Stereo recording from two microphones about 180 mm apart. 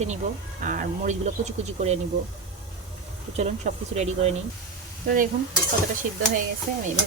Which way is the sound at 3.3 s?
40° right (ahead or behind).